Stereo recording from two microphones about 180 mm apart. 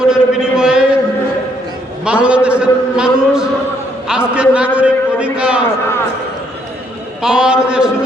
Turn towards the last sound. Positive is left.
turn(degrees=-5)  # may be behind; listen again after turning